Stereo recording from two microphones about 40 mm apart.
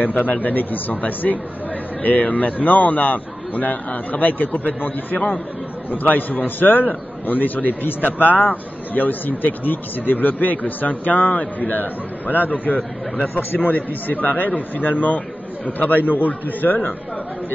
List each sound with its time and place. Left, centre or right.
0.0 s a man's voice: left
13.3 s speech: left
13.6 s speech: left